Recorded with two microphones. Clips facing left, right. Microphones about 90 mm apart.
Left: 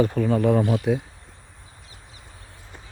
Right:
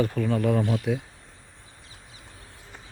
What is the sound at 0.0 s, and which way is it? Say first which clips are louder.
Speech: left 4 dB; 25° left (ahead or behind).